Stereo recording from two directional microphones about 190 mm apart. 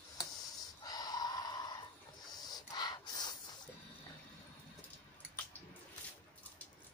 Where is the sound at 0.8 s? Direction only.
20° left (ahead or behind).